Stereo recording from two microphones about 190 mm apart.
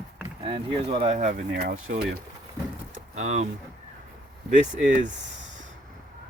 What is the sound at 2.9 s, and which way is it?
Vehicle, 35° right (ahead or behind).